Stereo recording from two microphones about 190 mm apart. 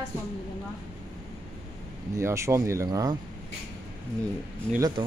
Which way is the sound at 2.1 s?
15° right (ahead or behind).